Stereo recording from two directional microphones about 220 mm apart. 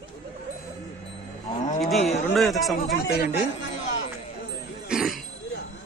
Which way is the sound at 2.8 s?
45° left (ahead or behind).